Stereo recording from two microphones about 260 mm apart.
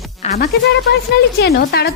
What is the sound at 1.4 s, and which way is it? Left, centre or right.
Speech, left.